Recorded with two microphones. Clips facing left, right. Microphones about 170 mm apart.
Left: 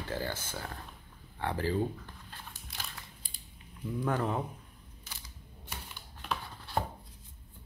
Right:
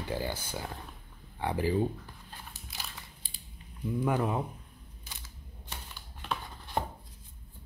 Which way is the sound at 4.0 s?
10° right (ahead or behind).